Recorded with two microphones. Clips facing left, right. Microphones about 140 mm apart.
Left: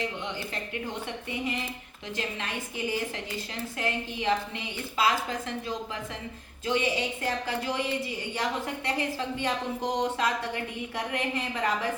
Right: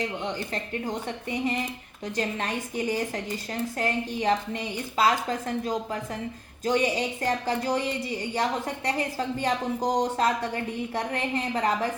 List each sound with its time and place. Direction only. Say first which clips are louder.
0.3 s speech: right 3 dB; 40° right (ahead or behind)
6.7 s speech: right 3 dB; 40° right (ahead or behind)